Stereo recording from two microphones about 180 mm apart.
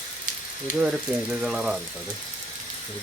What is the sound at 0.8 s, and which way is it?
Speech, 5° right (ahead or behind).